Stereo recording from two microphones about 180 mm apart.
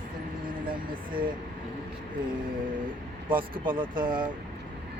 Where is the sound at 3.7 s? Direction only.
25° right (ahead or behind).